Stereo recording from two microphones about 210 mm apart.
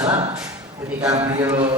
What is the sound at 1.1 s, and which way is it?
Speech, 10° right (ahead or behind).